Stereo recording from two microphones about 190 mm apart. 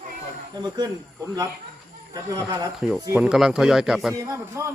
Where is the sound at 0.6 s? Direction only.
20° right (ahead or behind).